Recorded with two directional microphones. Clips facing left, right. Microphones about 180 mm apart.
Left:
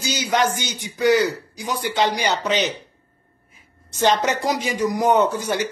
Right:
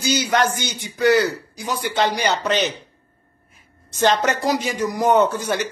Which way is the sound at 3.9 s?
15° left (ahead or behind).